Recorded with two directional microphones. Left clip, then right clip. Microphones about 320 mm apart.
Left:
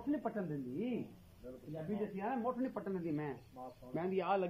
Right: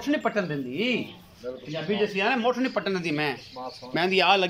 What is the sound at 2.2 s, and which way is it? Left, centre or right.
A man's voice, right.